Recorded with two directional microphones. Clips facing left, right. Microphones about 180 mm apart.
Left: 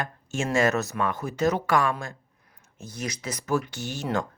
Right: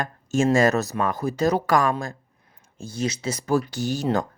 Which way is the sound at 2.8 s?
30° right (ahead or behind).